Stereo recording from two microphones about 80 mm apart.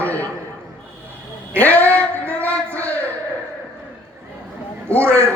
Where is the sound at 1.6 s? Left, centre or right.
Left.